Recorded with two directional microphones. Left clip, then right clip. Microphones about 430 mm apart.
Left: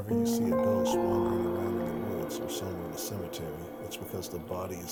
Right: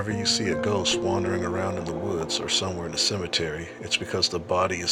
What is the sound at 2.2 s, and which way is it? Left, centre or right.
Speech, left.